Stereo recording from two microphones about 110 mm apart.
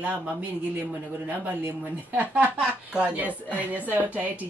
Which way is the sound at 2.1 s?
15° right (ahead or behind).